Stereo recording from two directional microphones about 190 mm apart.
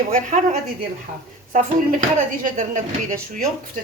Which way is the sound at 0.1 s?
40° right (ahead or behind).